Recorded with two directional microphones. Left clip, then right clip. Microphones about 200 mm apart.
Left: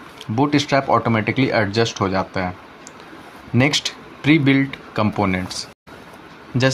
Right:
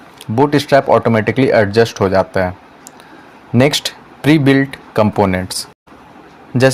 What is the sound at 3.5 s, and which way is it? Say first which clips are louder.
Speech: right 5 dB; 50° right (ahead or behind).